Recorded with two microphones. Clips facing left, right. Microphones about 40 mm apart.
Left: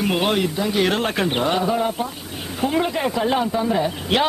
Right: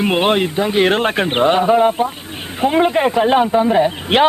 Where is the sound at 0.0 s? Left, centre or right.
Right.